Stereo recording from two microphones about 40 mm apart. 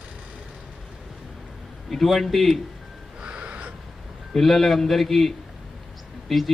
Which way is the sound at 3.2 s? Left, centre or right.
Right.